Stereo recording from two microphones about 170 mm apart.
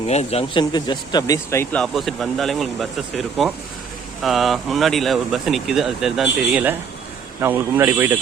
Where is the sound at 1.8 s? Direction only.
Centre (ahead or behind).